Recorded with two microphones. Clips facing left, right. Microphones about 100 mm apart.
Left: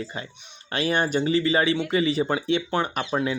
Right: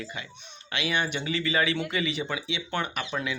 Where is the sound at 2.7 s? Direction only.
30° left (ahead or behind).